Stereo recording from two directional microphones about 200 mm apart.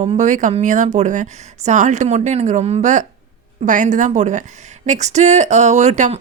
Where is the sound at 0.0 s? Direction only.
35° right (ahead or behind).